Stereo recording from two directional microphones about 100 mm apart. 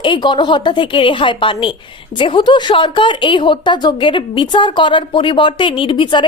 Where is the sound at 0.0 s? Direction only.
50° left (ahead or behind).